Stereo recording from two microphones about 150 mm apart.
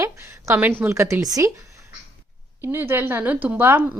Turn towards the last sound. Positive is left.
turn(degrees=-15)  # may be behind; listen again after turning